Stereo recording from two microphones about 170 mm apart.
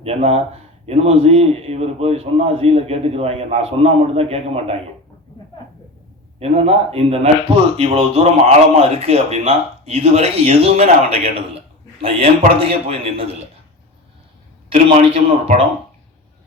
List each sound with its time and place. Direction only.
0.0 s speech: 35° right (ahead or behind)
6.4 s speech: 40° right (ahead or behind)
14.7 s speech: 40° right (ahead or behind)